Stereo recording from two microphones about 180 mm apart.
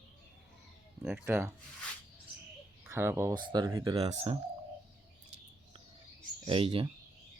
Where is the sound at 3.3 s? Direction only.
25° right (ahead or behind).